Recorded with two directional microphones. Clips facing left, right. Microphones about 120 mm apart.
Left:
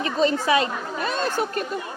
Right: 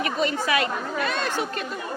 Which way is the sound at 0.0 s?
30° left (ahead or behind).